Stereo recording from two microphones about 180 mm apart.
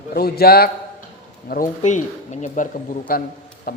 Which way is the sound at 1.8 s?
40° left (ahead or behind).